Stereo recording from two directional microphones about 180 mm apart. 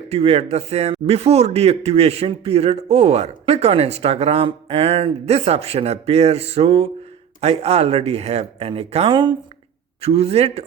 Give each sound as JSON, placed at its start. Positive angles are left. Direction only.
{"t": 0.1, "sound": "speech", "side_deg": -35}